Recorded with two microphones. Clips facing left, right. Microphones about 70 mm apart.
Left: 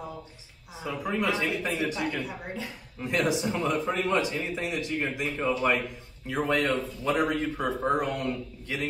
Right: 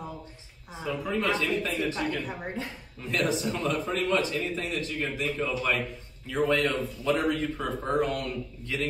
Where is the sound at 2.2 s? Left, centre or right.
Right.